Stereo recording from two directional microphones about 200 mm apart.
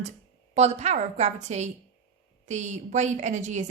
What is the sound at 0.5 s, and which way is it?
A woman's voice, 35° right (ahead or behind).